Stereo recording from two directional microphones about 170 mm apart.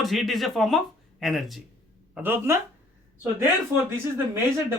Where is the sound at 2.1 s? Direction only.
10° right (ahead or behind).